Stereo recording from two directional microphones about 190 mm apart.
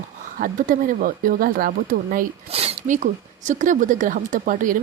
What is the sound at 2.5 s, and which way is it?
Speech, 30° right (ahead or behind).